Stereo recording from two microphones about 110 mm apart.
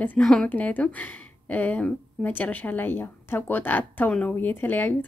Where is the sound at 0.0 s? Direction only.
15° left (ahead or behind).